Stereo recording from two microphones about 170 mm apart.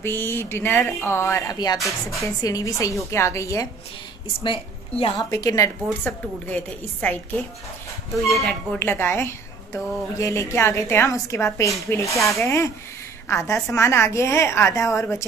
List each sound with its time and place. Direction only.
0.0 s a woman's voice: 15° left (ahead or behind)
4.4 s a woman's voice: 30° left (ahead or behind)
5.3 s a woman's voice: 20° left (ahead or behind)
6.0 s a woman's voice: 10° left (ahead or behind)
8.7 s a woman's voice: 10° left (ahead or behind)